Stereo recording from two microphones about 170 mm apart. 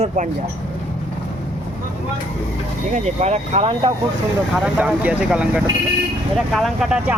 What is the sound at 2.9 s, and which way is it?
Speech, 40° right (ahead or behind).